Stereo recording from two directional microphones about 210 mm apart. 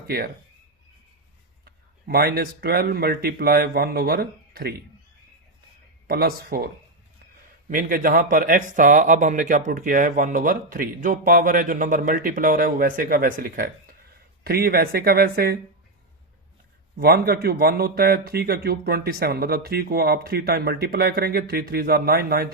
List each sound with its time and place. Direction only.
2.0 s speech: 45° right (ahead or behind)
6.1 s speech: 45° right (ahead or behind)
7.7 s speech: 40° right (ahead or behind)
17.0 s speech: 45° right (ahead or behind)